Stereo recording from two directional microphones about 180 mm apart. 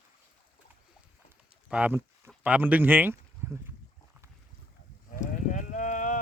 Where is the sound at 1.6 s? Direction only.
10° right (ahead or behind).